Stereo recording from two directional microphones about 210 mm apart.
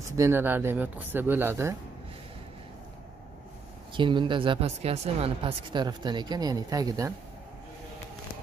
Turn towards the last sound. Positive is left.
turn(degrees=-15)  # may be behind; listen again after turning